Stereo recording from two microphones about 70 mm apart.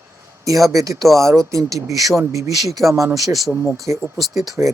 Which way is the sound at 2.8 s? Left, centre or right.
Centre.